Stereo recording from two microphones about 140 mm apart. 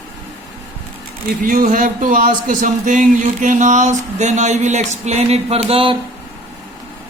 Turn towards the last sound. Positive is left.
turn(degrees=-40)  # may be behind; listen again after turning